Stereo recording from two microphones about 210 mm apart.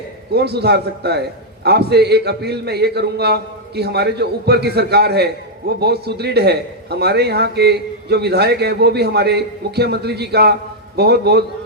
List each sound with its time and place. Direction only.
0.3 s a man's voice: 50° right (ahead or behind)